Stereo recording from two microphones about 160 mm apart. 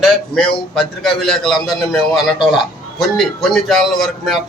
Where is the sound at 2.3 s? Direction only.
30° left (ahead or behind).